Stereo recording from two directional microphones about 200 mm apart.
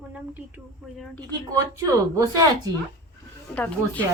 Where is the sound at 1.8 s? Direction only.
15° right (ahead or behind).